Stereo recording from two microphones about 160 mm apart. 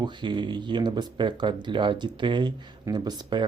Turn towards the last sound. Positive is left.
turn(degrees=-25)  # may be behind; listen again after turning